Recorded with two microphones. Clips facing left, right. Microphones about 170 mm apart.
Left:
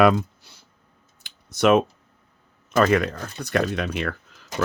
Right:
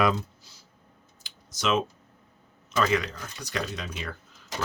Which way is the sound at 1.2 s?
60° left (ahead or behind).